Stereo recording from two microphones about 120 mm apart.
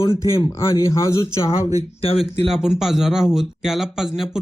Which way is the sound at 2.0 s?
55° left (ahead or behind).